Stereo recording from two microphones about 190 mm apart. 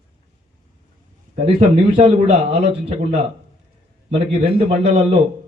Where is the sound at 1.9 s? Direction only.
35° right (ahead or behind).